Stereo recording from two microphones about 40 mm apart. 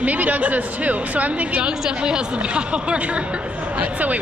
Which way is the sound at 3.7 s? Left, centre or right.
Right.